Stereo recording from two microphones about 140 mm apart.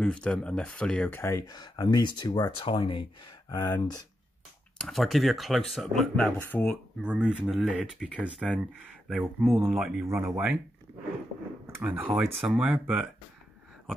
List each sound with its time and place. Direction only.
0.0 s speech: 5° left (ahead or behind); by 3.1 s 40° left (ahead or behind)
3.4 s speech: 25° left (ahead or behind)
4.8 s speech: centre (ahead or behind)
7.0 s speech: 10° right (ahead or behind)
9.8 s speech: centre (ahead or behind)
10.2 s speech: 20° right (ahead or behind)
11.8 s speech: 10° right (ahead or behind)